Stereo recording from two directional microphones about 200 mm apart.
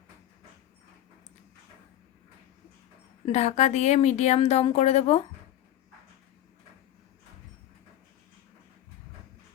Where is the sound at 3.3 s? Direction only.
35° left (ahead or behind).